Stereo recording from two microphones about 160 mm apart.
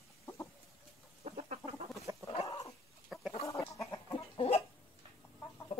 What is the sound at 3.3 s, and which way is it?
Chicken, 20° left (ahead or behind).